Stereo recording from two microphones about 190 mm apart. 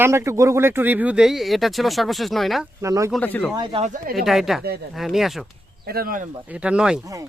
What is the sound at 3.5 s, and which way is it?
Speech, 25° right (ahead or behind).